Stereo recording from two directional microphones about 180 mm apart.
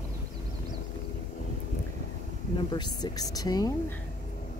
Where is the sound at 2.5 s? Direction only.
25° left (ahead or behind).